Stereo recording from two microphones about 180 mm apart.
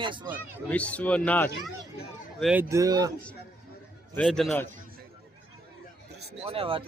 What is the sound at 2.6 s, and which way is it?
Speech, 20° right (ahead or behind).